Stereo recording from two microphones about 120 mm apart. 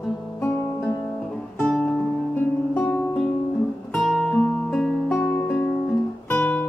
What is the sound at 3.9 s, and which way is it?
Guitar, 5° left (ahead or behind).